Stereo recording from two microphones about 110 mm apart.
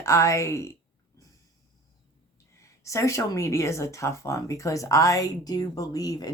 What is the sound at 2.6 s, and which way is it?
Speech, 30° left (ahead or behind).